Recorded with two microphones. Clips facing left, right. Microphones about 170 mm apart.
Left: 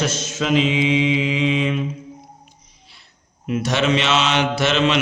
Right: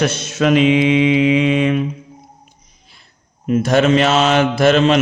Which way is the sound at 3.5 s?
45° right (ahead or behind).